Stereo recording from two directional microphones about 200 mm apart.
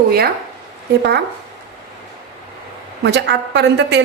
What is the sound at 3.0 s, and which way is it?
A woman's voice, 60° right (ahead or behind).